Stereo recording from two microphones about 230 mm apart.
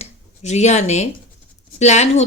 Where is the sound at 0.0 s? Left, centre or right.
Left.